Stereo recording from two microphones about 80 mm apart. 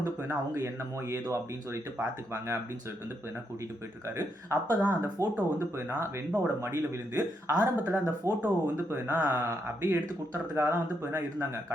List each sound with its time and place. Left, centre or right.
0.3 s a man's voice: right
4.4 s a man's voice: right